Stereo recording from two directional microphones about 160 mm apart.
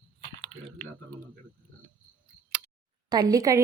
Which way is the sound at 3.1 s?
25° right (ahead or behind).